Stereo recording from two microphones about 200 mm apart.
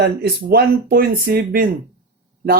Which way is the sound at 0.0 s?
55° right (ahead or behind).